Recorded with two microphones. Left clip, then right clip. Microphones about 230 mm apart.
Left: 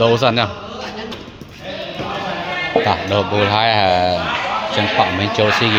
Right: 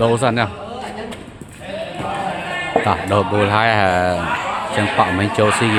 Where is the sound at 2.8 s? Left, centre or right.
Centre.